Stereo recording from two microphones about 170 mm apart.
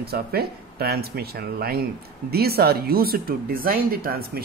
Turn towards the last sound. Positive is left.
turn(degrees=-65)  # may be behind; listen again after turning